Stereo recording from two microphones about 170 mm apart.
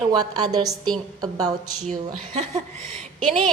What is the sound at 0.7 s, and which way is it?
Speech, centre (ahead or behind).